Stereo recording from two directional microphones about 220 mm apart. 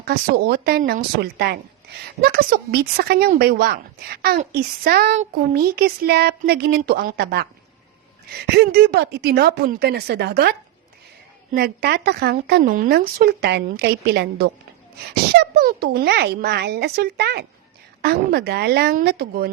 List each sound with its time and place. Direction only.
0.0 s a woman's voice: 45° right (ahead or behind)
11.5 s a woman's voice: 45° right (ahead or behind)